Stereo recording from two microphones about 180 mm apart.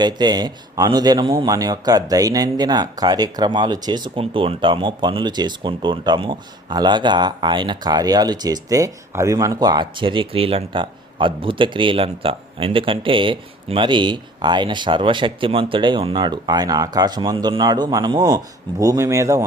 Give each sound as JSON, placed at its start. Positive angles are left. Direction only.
{"t": 0.0, "sound": "speech", "side_deg": -25}